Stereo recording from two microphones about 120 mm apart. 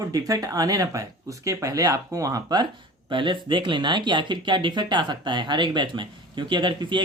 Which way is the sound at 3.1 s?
45° right (ahead or behind).